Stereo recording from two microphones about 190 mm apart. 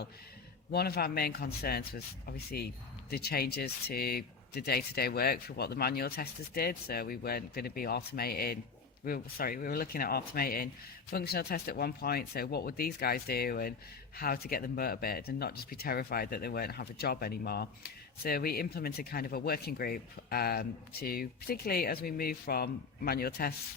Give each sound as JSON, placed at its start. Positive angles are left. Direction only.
{"t": 0.7, "sound": "speech", "side_deg": 55}